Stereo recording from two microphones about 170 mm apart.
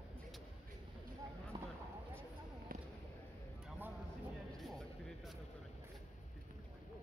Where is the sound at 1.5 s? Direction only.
25° right (ahead or behind).